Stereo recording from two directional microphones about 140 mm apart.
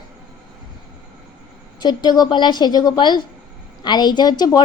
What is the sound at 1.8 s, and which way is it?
A woman's voice, 30° left (ahead or behind).